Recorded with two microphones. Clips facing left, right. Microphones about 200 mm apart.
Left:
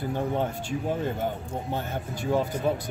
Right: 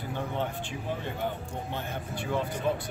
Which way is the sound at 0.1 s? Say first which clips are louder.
Left 4 dB; 40° left (ahead or behind).